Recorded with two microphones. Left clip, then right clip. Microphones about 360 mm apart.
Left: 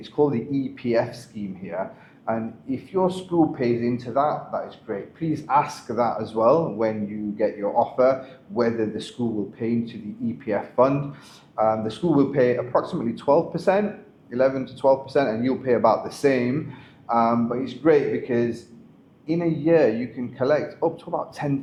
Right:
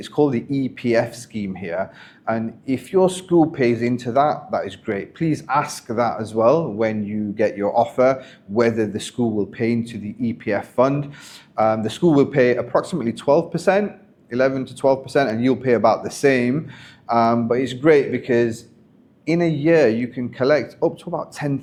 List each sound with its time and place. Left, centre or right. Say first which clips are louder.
0.0 s speech: right 3 dB; right